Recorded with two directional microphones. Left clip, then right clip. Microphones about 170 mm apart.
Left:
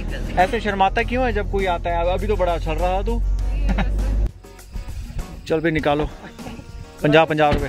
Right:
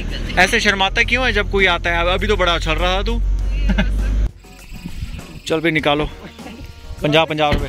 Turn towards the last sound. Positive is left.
turn(degrees=35)  # may be behind; listen again after turning